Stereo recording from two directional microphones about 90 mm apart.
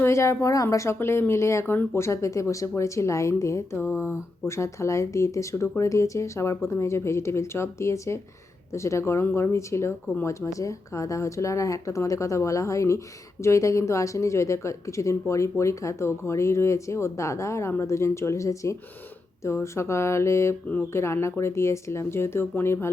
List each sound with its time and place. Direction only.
0.0 s speech: 30° left (ahead or behind)